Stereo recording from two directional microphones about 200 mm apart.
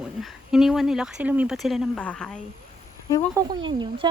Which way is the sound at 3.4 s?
20° right (ahead or behind).